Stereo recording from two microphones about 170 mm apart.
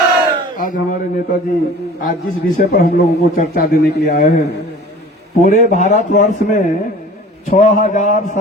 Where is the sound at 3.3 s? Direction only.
45° left (ahead or behind).